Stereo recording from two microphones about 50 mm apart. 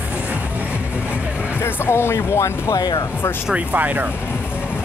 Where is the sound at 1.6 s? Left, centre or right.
Left.